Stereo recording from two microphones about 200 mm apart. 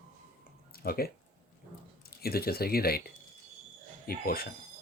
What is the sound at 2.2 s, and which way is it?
Speech, 50° left (ahead or behind).